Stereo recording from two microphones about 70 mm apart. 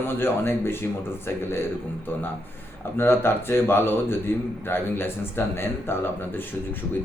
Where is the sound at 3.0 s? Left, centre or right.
Left.